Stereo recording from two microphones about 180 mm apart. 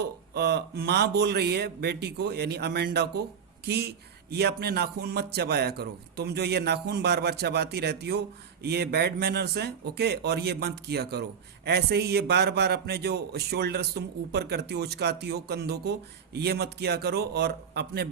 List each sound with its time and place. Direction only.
0.0 s speech: 65° right (ahead or behind)